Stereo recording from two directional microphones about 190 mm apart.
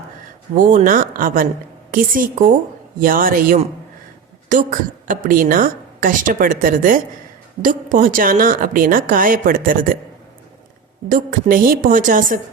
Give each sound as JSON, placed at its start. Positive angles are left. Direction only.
{"t": 0.5, "sound": "a woman's voice", "side_deg": -40}
{"t": 11.1, "sound": "a woman's voice", "side_deg": -45}